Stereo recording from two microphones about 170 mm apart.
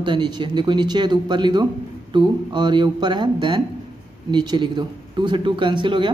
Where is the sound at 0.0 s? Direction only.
25° right (ahead or behind).